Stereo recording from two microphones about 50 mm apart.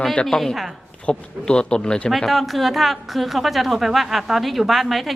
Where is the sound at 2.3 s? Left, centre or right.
Centre.